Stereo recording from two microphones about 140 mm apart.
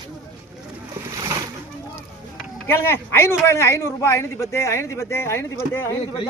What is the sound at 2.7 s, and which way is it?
Speech, 15° left (ahead or behind).